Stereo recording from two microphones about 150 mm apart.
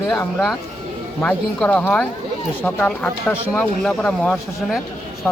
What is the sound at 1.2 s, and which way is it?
Speech, 10° left (ahead or behind).